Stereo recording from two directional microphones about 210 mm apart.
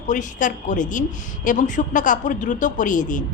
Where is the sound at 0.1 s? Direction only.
35° left (ahead or behind).